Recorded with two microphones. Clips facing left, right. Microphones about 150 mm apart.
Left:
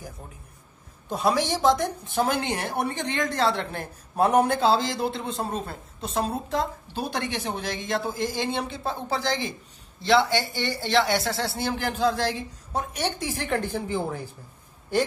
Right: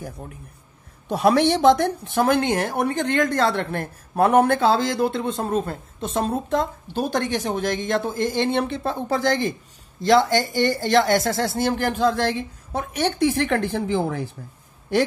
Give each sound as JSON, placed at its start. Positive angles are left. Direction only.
{"t": 1.0, "sound": "speech", "side_deg": -65}